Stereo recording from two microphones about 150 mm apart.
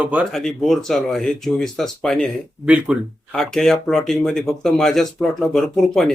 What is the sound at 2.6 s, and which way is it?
Speech, 5° right (ahead or behind).